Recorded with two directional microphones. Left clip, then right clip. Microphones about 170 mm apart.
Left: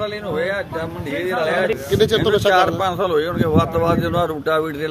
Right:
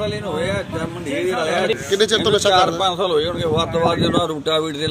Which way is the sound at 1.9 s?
5° left (ahead or behind).